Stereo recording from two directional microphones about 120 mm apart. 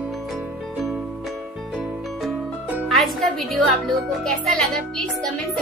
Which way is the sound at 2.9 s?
Centre (ahead or behind).